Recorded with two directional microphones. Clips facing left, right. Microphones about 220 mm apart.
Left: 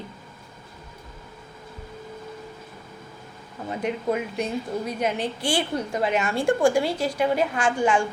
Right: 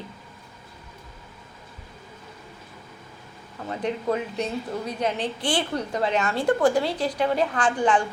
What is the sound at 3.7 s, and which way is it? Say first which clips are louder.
A woman's voice: even; 15° left (ahead or behind).